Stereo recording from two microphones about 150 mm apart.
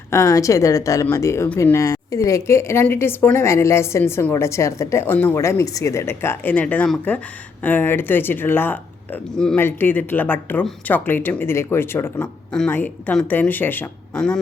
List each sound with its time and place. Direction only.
0.1 s a woman's voice: 20° left (ahead or behind); by 14.3 s 5° left (ahead or behind)